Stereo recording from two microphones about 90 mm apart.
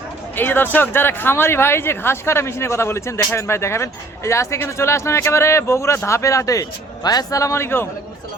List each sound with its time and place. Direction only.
0.3 s speech: 25° left (ahead or behind)